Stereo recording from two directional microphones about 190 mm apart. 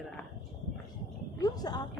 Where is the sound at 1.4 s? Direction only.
20° left (ahead or behind).